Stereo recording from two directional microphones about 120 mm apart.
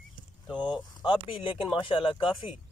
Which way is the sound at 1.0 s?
45° left (ahead or behind).